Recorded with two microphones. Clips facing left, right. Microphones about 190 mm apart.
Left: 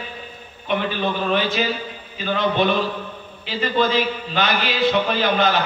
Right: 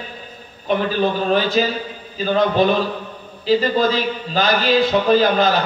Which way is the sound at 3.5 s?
35° right (ahead or behind).